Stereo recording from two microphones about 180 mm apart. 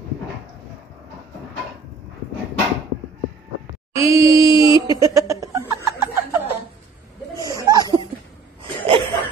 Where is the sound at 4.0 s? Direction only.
15° right (ahead or behind).